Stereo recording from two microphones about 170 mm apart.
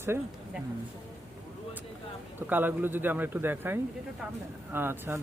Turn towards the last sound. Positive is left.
turn(degrees=-15)  # may be behind; listen again after turning